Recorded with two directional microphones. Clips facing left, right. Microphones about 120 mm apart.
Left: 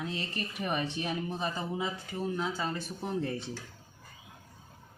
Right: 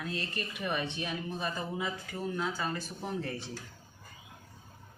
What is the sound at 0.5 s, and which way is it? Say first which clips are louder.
Speech: left 2 dB; 35° left (ahead or behind).